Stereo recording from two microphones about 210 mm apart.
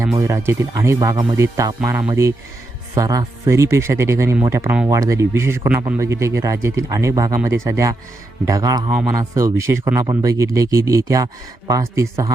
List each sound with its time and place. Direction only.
0.0 s speech: 15° right (ahead or behind)